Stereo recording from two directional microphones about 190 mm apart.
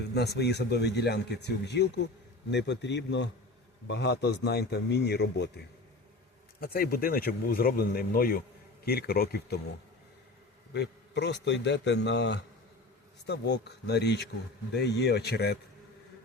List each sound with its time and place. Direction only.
0.1 s a man's voice: 60° left (ahead or behind)
6.6 s speech: 50° left (ahead or behind)
10.8 s speech: 65° left (ahead or behind)